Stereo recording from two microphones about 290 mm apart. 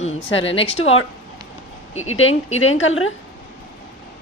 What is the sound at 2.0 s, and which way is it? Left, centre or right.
A woman's voice, left.